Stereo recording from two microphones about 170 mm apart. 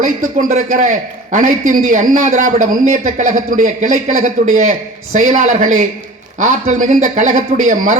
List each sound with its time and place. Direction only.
0.0 s a man's voice: 50° right (ahead or behind)